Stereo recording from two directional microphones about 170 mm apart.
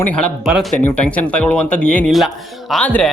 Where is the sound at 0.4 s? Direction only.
Centre (ahead or behind).